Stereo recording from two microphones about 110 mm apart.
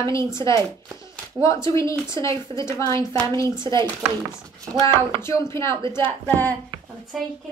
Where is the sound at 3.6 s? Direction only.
45° right (ahead or behind).